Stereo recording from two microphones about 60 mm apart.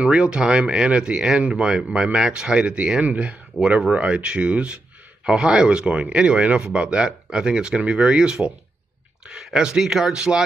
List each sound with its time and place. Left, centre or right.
0.0 s speech: centre
3.6 s speech: centre
3.9 s speech: centre